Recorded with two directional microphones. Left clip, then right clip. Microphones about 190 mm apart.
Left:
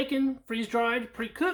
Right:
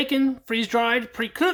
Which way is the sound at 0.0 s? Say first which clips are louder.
Right 6 dB; 30° right (ahead or behind).